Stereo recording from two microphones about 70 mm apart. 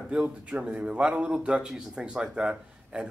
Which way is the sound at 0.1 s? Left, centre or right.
Centre.